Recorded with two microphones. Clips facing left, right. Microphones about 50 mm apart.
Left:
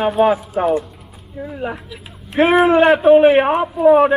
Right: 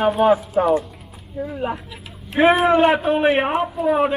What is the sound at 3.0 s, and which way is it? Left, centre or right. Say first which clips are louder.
Speech: left 8 dB; centre.